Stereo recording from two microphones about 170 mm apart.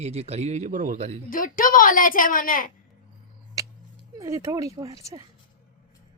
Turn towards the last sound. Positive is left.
turn(degrees=-20)  # may be behind; listen again after turning